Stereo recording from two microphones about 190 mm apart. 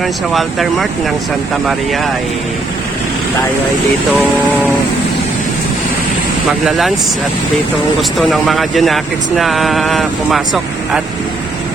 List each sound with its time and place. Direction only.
0.3 s speech: centre (ahead or behind)
6.7 s speech: centre (ahead or behind)
8.2 s speech: centre (ahead or behind)